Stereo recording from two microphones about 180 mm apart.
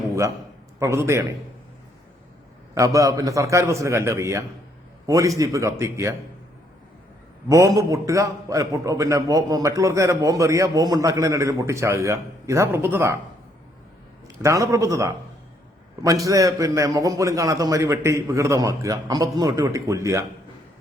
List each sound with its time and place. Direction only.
0.8 s a man's voice: 15° right (ahead or behind)
2.7 s a man's voice: 20° right (ahead or behind)
7.4 s a man's voice: 15° right (ahead or behind)
14.3 s a man's voice: 15° right (ahead or behind)